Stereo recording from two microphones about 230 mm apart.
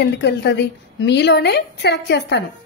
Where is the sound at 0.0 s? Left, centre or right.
Left.